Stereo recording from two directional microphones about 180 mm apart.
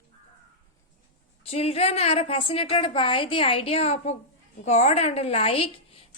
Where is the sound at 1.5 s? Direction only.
35° left (ahead or behind).